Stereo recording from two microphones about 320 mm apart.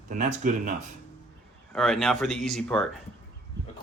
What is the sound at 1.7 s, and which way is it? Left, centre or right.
Speech, centre.